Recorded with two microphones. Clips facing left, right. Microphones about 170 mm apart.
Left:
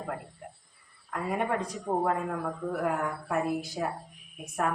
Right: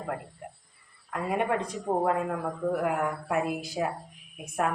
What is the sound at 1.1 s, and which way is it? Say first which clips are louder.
A woman's voice: right 2 dB; 5° right (ahead or behind).